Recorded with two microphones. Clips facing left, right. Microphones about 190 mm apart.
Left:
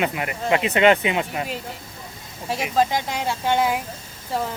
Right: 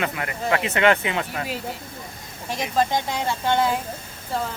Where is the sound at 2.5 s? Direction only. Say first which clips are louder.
Left 1 dB; 10° left (ahead or behind).